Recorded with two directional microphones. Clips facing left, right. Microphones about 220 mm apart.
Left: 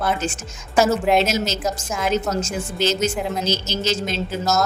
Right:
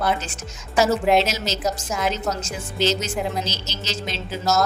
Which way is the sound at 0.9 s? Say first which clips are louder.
Right 2 dB; centre (ahead or behind).